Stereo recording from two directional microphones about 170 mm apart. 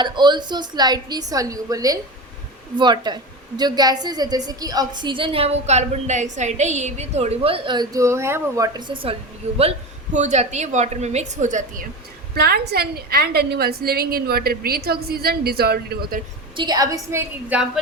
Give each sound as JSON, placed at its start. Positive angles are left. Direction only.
{"t": 0.0, "sound": "a woman's voice", "side_deg": -25}
{"t": 10.2, "sound": "a woman's voice", "side_deg": -45}
{"t": 12.3, "sound": "a woman's voice", "side_deg": -65}
{"t": 16.6, "sound": "a woman's voice", "side_deg": -25}